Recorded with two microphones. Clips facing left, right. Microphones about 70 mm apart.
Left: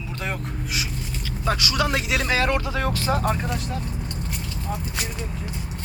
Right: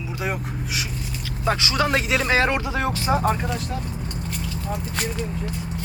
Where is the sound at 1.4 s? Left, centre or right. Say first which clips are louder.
Right 2 dB; right.